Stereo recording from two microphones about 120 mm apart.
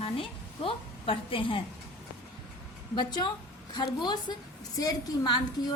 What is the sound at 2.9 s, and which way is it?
A woman's voice, 40° left (ahead or behind).